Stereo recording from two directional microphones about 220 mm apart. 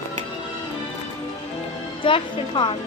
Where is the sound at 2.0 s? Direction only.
20° left (ahead or behind).